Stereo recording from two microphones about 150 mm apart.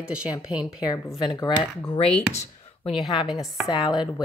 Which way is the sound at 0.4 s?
5° right (ahead or behind).